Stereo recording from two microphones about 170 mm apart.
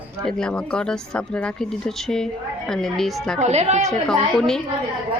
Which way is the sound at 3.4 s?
40° right (ahead or behind).